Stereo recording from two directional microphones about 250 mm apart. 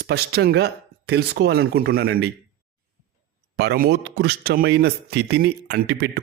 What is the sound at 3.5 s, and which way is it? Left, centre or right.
Speech, right.